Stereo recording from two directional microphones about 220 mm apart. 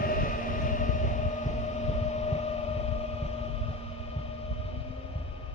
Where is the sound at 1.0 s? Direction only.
30° left (ahead or behind).